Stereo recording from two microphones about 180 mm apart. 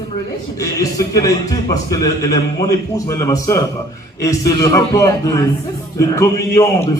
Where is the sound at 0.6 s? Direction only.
20° left (ahead or behind).